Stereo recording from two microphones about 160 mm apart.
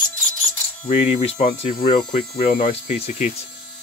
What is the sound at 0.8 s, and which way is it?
Speech, 45° left (ahead or behind).